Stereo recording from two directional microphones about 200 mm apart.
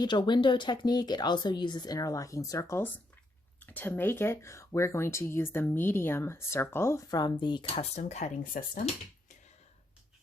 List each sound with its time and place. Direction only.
0.0 s speech: 20° left (ahead or behind); by 8.8 s 40° left (ahead or behind)